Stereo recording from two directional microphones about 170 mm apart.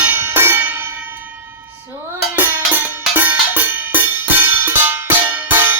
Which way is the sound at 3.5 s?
10° right (ahead or behind).